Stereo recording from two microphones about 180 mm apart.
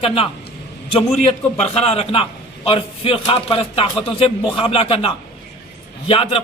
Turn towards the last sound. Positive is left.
turn(degrees=30)  # may be behind; listen again after turning